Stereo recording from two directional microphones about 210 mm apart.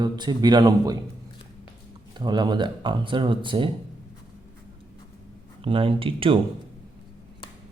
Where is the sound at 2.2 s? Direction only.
20° right (ahead or behind).